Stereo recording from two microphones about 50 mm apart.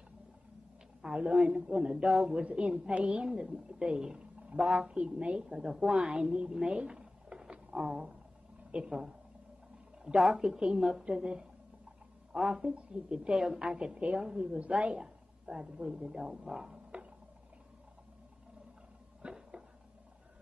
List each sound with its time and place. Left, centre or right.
1.0 s a woman's voice: centre
2.4 s a woman's voice: right
12.7 s a woman's voice: centre
19.2 s a sound: centre